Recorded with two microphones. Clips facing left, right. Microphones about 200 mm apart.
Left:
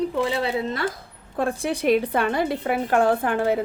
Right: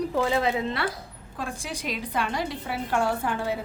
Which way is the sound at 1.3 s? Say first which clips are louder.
Left 10 dB; 60° left (ahead or behind).